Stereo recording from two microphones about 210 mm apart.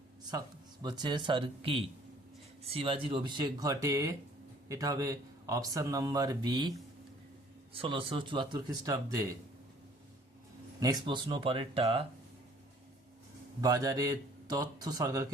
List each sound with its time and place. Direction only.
0.3 s speech: 20° right (ahead or behind)
10.8 s speech: 20° right (ahead or behind)
13.6 s speech: 15° right (ahead or behind)